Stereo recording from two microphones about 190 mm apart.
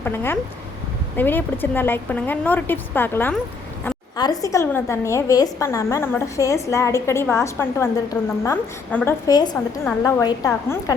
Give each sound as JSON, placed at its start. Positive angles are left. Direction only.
{"t": 0.0, "sound": "a woman's voice", "side_deg": 10}